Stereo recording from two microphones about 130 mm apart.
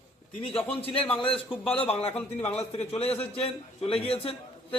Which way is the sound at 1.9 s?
50° left (ahead or behind).